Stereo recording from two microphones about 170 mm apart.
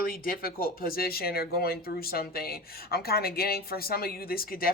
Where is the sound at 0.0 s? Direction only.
60° left (ahead or behind).